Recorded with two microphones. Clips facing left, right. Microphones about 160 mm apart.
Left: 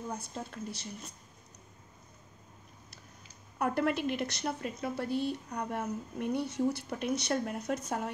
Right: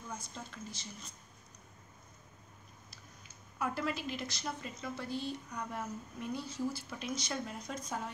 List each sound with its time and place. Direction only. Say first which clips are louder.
0.1 s a woman's voice: left 6 dB; 60° left (ahead or behind)
3.5 s a woman's voice: left 6 dB; 60° left (ahead or behind)